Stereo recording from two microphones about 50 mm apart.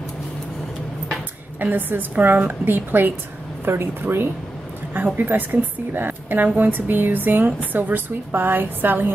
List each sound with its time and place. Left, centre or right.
1.6 s a woman's voice: right
4.9 s a woman's voice: right